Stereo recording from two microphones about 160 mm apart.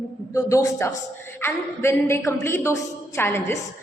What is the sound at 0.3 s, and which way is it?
A man's voice, 20° left (ahead or behind).